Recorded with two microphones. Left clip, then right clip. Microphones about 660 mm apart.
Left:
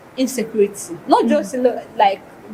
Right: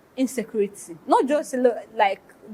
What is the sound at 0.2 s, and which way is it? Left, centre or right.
A woman's voice, right.